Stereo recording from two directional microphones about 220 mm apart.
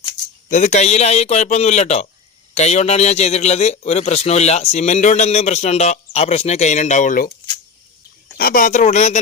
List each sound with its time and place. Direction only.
0.5 s a man's voice: 30° left (ahead or behind)
8.4 s a man's voice: 40° left (ahead or behind)